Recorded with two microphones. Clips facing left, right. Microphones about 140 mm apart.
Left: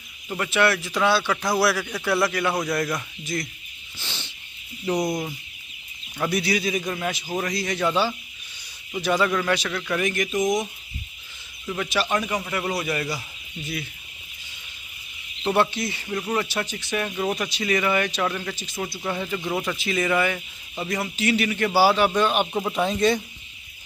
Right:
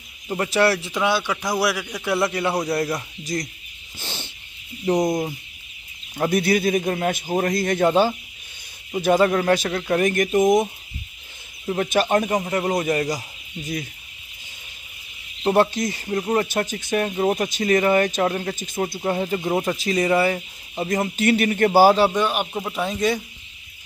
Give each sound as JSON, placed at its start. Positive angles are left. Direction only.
{"t": 0.4, "sound": "speech", "side_deg": -35}
{"t": 0.9, "sound": "a man's voice", "side_deg": -15}
{"t": 4.0, "sound": "bird", "side_deg": -45}
{"t": 4.8, "sound": "speech", "side_deg": -20}
{"t": 6.1, "sound": "speech", "side_deg": -45}
{"t": 11.6, "sound": "speech", "side_deg": -40}
{"t": 15.4, "sound": "speech", "side_deg": -40}
{"t": 18.9, "sound": "speech", "side_deg": -35}
{"t": 20.9, "sound": "speech", "side_deg": -45}
{"t": 22.1, "sound": "speech", "side_deg": -10}